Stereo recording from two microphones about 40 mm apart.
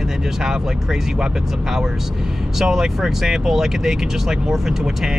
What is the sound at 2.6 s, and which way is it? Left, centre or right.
Speech, centre.